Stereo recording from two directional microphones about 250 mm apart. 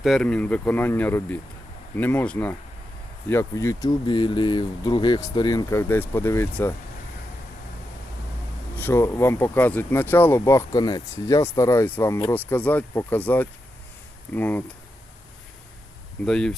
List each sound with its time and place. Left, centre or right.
0.0 s speech: centre
8.7 s speech: centre
16.2 s speech: centre